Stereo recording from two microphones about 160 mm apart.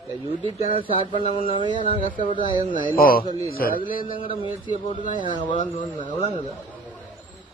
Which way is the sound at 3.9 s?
60° left (ahead or behind).